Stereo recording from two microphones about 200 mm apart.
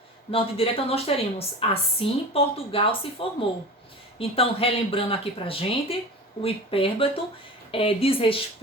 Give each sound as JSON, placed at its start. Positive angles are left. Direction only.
{"t": 0.3, "sound": "a woman's voice", "side_deg": 25}